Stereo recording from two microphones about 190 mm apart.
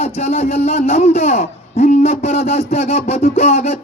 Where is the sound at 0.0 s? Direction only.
35° left (ahead or behind).